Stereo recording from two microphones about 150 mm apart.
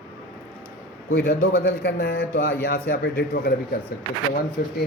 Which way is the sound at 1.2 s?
90° left.